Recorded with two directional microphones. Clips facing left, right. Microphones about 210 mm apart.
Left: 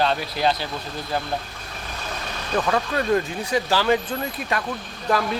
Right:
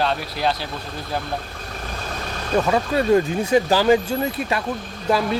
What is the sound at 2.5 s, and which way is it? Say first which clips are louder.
Speech: right 4 dB; 25° right (ahead or behind).